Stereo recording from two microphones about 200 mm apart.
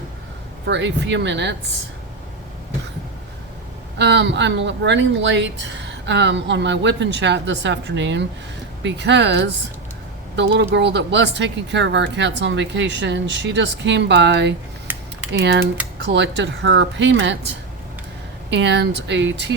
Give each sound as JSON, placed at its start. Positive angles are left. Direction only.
{"t": 0.6, "sound": "speech", "side_deg": -60}
{"t": 3.9, "sound": "speech", "side_deg": -60}
{"t": 14.9, "sound": "typing", "side_deg": -10}
{"t": 15.3, "sound": "speech", "side_deg": -60}
{"t": 18.5, "sound": "speech", "side_deg": -60}